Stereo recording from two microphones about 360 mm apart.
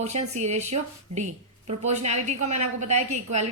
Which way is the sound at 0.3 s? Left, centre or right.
Centre.